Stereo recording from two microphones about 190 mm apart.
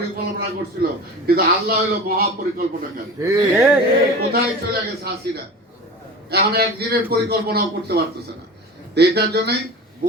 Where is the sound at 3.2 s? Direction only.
15° right (ahead or behind).